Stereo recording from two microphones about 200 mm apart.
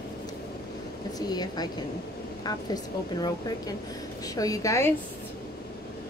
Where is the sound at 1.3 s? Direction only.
20° left (ahead or behind).